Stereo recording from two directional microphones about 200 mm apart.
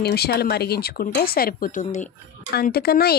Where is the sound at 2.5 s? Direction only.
50° left (ahead or behind).